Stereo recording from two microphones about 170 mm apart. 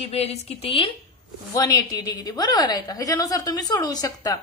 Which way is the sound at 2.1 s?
20° left (ahead or behind).